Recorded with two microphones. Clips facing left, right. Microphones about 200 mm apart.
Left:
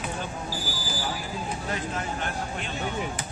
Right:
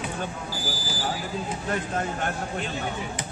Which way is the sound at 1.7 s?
50° right (ahead or behind).